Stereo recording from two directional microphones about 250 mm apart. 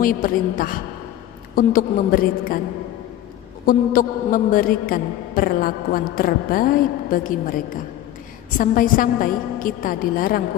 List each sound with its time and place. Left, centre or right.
0.0 s a woman's voice: left
3.6 s a woman's voice: left